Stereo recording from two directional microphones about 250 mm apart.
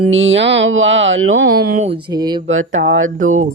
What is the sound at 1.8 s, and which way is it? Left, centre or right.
Speech, centre.